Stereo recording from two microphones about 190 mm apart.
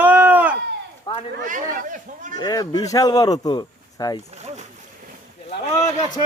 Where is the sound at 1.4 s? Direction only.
45° right (ahead or behind).